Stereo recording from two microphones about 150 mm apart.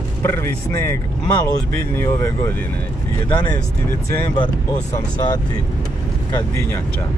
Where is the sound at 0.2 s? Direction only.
15° left (ahead or behind).